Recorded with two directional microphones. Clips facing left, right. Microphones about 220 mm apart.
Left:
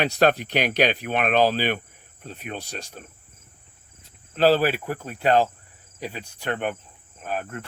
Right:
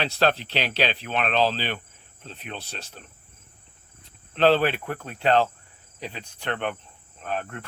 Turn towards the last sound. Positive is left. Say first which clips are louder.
# left 1 dB
turn(degrees=5)  # may be behind; listen again after turning